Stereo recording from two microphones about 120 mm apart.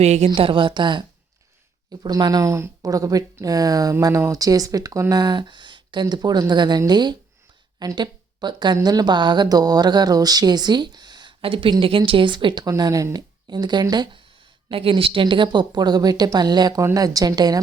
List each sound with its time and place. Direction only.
0.0 s a woman's voice: 65° right (ahead or behind)
0.3 s a woman's voice: 45° right (ahead or behind)
2.0 s a woman's voice: 35° right (ahead or behind)
12.6 s a woman's voice: 30° right (ahead or behind)
14.7 s a woman's voice: 50° right (ahead or behind); by 17.6 s 35° right (ahead or behind)